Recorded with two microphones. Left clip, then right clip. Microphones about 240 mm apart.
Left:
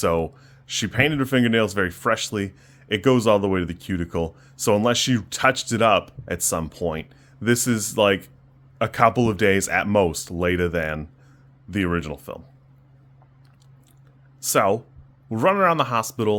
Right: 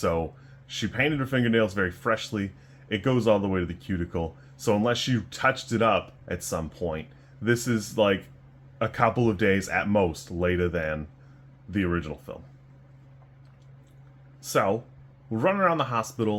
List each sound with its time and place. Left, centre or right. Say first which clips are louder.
0.0 s speech: left 5 dB; left
14.4 s speech: left 5 dB; left